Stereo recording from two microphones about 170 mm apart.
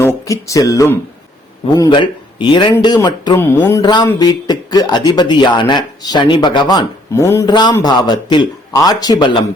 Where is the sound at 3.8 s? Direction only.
25° left (ahead or behind).